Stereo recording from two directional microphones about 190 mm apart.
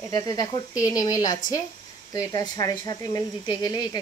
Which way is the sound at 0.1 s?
20° left (ahead or behind).